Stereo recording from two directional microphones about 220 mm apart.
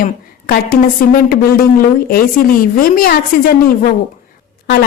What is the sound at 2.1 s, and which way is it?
A woman's voice, 40° left (ahead or behind).